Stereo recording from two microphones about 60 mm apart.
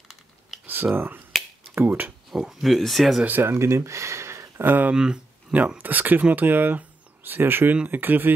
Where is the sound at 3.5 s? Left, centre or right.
Right.